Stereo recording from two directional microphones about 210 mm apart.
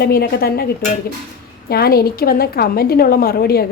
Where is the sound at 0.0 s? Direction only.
45° left (ahead or behind).